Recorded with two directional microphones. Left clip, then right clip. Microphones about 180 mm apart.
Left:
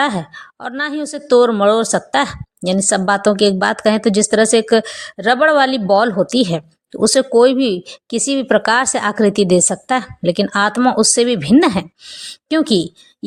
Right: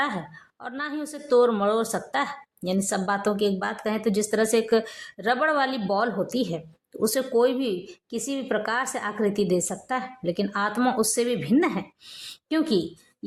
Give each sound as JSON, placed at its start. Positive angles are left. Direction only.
{"t": 0.0, "sound": "a woman's voice", "side_deg": 35}
{"t": 12.0, "sound": "a woman's voice", "side_deg": 25}